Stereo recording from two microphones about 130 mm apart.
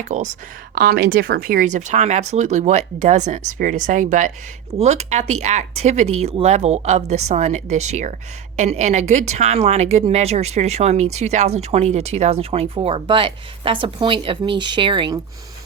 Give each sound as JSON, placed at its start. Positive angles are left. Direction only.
{"t": 0.0, "sound": "speech", "side_deg": -65}
{"t": 1.5, "sound": "speech", "side_deg": -80}
{"t": 4.8, "sound": "speech", "side_deg": -60}